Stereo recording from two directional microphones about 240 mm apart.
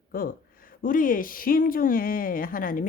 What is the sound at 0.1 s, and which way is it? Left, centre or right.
Speech, left.